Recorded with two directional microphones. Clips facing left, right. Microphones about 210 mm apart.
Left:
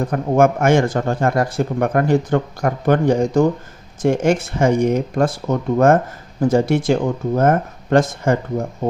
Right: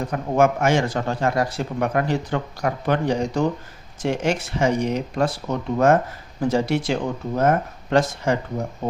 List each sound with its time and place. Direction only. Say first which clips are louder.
0.0 s speech: left 4 dB; 50° left (ahead or behind)